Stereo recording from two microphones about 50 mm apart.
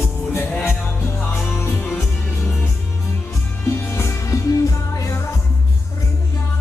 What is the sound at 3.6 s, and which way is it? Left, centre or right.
Music, left.